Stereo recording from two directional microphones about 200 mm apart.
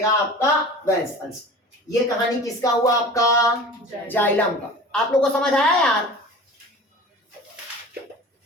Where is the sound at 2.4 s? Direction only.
15° left (ahead or behind).